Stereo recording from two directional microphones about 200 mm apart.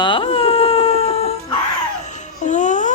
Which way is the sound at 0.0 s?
25° left (ahead or behind).